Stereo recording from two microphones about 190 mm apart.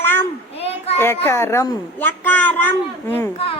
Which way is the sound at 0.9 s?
10° left (ahead or behind).